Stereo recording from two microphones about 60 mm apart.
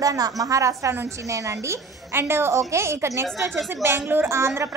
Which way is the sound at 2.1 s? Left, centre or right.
Right.